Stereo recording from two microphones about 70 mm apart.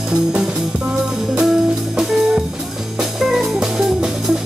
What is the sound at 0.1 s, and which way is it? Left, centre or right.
Music, centre.